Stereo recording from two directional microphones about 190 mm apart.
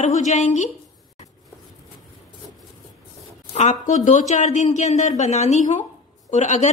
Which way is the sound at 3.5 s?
40° left (ahead or behind).